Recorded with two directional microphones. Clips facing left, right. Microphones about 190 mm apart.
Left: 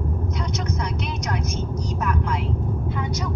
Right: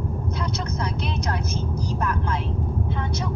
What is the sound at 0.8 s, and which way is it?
Vehicle, 30° right (ahead or behind).